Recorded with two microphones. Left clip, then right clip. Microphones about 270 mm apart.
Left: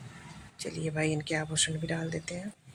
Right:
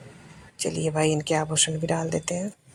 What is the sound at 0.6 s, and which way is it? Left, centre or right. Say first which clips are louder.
Speech: right 8 dB; centre.